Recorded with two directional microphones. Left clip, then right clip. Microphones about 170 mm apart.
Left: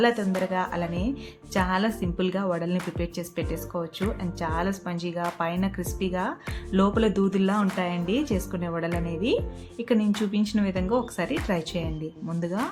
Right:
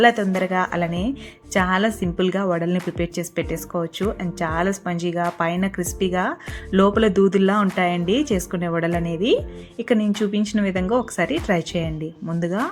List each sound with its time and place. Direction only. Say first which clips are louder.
0.0 s speech: right 7 dB; 25° right (ahead or behind)